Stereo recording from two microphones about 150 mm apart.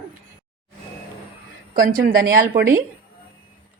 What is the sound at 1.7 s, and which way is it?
Speech, 70° right (ahead or behind).